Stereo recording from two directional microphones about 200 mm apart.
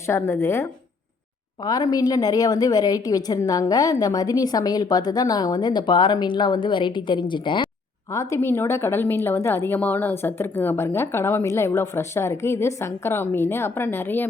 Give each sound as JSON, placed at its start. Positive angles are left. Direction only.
{"t": 0.1, "sound": "a woman's voice", "side_deg": 15}